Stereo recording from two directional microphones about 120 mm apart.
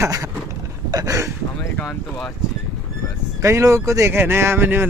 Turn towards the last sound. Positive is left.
turn(degrees=-20)  # may be behind; listen again after turning